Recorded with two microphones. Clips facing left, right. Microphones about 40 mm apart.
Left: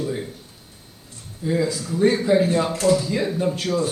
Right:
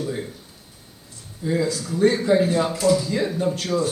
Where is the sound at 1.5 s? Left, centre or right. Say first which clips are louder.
Left 1 dB; centre.